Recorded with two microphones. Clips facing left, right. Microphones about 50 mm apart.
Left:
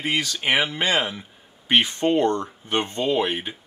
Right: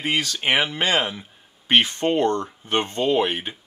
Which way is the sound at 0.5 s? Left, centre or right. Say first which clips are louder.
Right 1 dB; centre.